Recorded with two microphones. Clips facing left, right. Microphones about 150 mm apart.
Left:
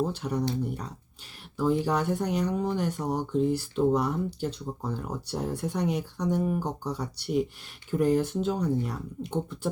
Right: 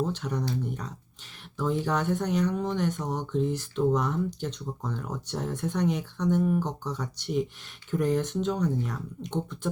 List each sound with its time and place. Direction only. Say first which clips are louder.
0.1 s speech: left 1 dB; 10° left (ahead or behind)